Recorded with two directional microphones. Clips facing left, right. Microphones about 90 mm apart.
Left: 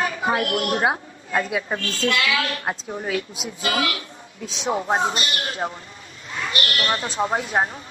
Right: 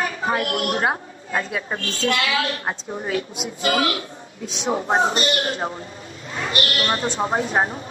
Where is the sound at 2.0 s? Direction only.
35° right (ahead or behind).